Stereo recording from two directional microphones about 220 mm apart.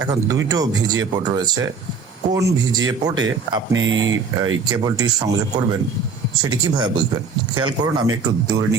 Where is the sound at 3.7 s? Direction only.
60° right (ahead or behind).